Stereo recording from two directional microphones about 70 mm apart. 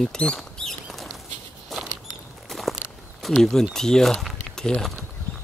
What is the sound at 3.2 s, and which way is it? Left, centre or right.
Speech, centre.